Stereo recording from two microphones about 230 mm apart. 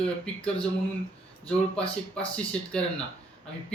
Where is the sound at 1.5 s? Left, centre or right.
Centre.